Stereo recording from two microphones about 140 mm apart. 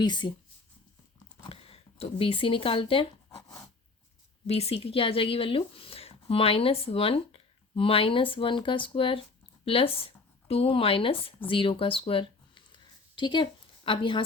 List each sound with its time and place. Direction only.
0.0 s speech: 35° left (ahead or behind)
1.5 s speech: 45° left (ahead or behind)
4.4 s speech: 45° left (ahead or behind)
11.4 s a sound: 40° left (ahead or behind)